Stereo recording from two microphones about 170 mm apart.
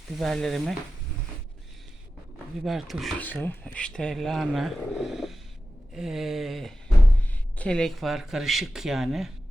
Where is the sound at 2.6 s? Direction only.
Centre (ahead or behind).